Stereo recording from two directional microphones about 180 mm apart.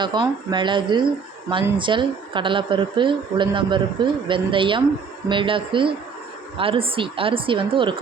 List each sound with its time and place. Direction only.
0.0 s a woman's voice: 25° right (ahead or behind)